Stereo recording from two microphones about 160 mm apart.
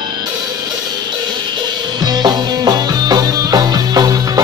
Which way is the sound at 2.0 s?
25° right (ahead or behind).